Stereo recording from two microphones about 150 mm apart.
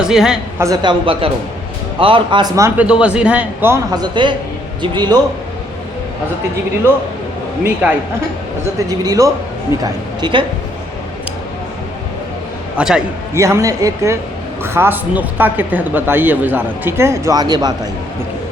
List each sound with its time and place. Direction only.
0.0 s a woman's voice: 5° right (ahead or behind)
0.6 s speech: 25° right (ahead or behind)
2.6 s speech: 20° right (ahead or behind)
2.8 s speech: 5° right (ahead or behind)
3.9 s a man's voice: 30° right (ahead or behind)
7.6 s speech: 10° right (ahead or behind)
8.9 s a man's voice: 20° right (ahead or behind)
12.7 s speech: 5° right (ahead or behind)
13.3 s a man's voice: 20° right (ahead or behind)